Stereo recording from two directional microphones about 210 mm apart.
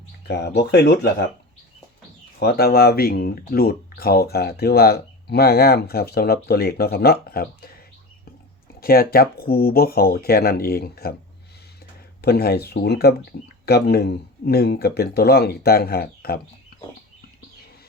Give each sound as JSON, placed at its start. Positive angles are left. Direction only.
{"t": 0.3, "sound": "speech", "side_deg": 50}
{"t": 2.4, "sound": "speech", "side_deg": 50}
{"t": 8.8, "sound": "speech", "side_deg": 45}
{"t": 12.2, "sound": "speech", "side_deg": 50}